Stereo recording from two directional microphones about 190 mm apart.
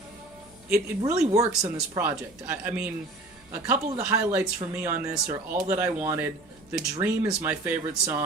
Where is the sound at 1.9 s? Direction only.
15° right (ahead or behind).